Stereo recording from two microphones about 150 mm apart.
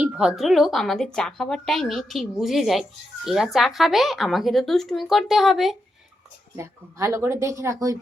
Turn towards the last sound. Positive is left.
turn(degrees=-20)  # may be behind; listen again after turning